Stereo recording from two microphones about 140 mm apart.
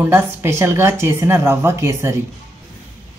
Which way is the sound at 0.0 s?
15° right (ahead or behind).